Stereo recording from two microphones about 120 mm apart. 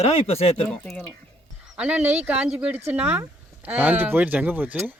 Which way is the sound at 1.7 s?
15° right (ahead or behind).